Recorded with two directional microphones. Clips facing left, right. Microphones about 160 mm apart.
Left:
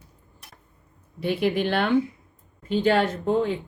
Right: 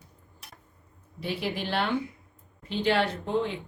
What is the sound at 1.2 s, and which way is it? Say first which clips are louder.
A man's voice: left 8 dB; 55° left (ahead or behind).